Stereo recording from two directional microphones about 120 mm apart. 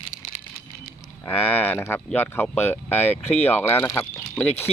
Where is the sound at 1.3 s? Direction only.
15° left (ahead or behind).